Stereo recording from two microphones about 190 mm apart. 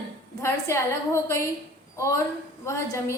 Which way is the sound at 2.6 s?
15° left (ahead or behind).